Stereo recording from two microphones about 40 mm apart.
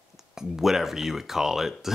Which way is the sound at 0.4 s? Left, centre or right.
Centre.